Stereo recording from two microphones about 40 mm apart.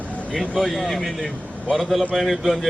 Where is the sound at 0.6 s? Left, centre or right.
Centre.